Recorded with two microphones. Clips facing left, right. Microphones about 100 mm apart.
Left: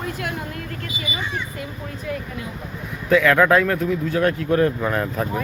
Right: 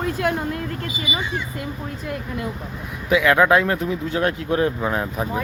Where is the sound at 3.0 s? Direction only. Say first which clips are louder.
Left 1 dB; 15° right (ahead or behind).